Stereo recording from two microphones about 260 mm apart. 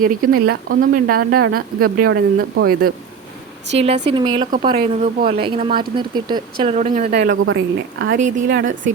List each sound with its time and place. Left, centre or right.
0.0 s speech: right
3.8 s a woman's voice: right
4.7 s speech: right
5.5 s speech: right